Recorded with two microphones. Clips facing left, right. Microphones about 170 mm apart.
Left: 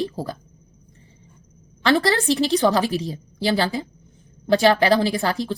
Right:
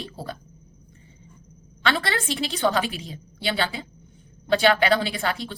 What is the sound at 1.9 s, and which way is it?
Speech, 40° left (ahead or behind).